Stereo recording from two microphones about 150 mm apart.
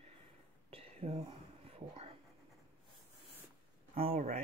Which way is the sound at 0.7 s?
40° right (ahead or behind).